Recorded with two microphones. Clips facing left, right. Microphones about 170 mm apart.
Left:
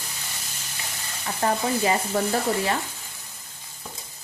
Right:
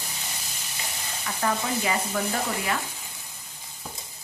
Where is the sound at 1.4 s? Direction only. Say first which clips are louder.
Left 4 dB; 30° left (ahead or behind).